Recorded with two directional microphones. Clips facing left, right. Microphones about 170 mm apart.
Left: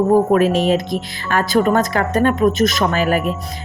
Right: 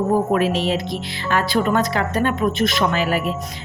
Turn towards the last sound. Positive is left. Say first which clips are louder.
# left 3 dB
turn(degrees=45)  # may be behind; listen again after turning